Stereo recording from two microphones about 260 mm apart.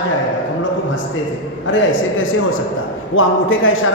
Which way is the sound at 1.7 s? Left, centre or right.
Left.